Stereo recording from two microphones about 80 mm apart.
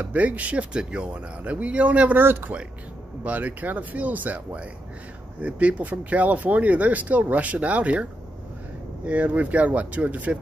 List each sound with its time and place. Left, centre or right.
0.0 s speech: right